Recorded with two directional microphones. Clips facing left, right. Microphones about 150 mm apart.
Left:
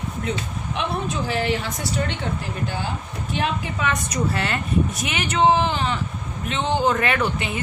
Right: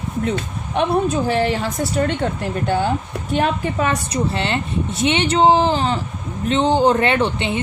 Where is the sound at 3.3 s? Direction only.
45° right (ahead or behind).